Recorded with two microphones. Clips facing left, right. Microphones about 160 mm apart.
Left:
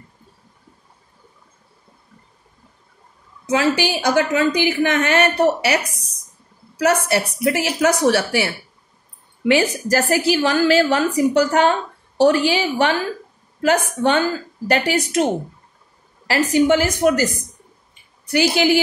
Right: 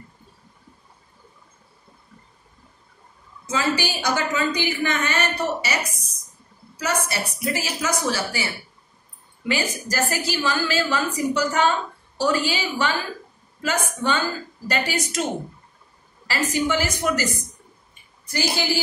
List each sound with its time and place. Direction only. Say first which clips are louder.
3.4 s a woman's voice: left 6 dB; 65° left (ahead or behind)
6.8 s a woman's voice: left 8 dB; 65° left (ahead or behind)
16.3 s a woman's voice: left 8 dB; 55° left (ahead or behind)
18.2 s a woman's voice: left 9 dB; 70° left (ahead or behind)